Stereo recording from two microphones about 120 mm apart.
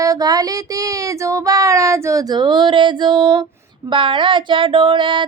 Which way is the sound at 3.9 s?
45° right (ahead or behind).